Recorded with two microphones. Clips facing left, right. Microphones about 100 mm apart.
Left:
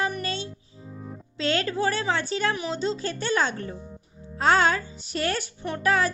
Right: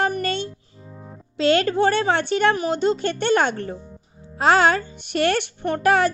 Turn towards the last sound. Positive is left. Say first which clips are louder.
# right 6 dB
turn(degrees=-75)  # may be behind; listen again after turning